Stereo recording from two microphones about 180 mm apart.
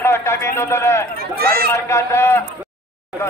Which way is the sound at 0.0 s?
15° left (ahead or behind).